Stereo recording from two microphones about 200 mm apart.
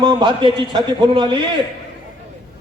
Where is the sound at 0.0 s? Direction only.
25° right (ahead or behind).